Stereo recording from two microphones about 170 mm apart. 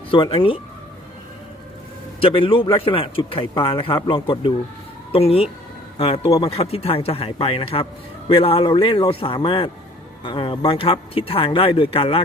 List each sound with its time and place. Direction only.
0.1 s a man's voice: 30° left (ahead or behind)
2.2 s a man's voice: 30° left (ahead or behind)